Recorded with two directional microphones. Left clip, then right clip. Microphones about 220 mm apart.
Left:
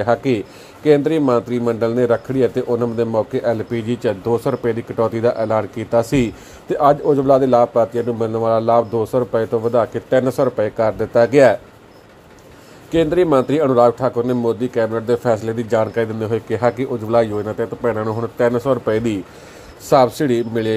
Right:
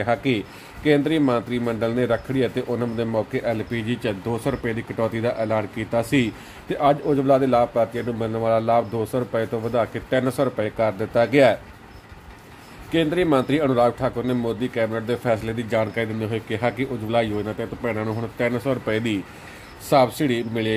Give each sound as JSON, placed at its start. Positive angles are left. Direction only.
{"t": 0.0, "sound": "speech", "side_deg": 15}
{"t": 12.9, "sound": "speech", "side_deg": 15}